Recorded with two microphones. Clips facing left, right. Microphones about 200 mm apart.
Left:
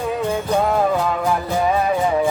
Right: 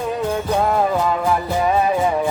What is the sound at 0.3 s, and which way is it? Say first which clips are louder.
Music: even; centre (ahead or behind).